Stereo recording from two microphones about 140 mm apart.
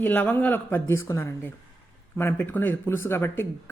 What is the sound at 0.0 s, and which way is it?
Speech, 10° left (ahead or behind).